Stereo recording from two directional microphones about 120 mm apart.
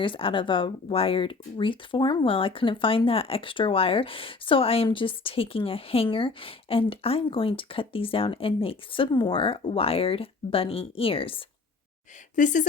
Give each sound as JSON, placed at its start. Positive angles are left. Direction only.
{"t": 0.0, "sound": "speech", "side_deg": 45}
{"t": 12.4, "sound": "speech", "side_deg": 90}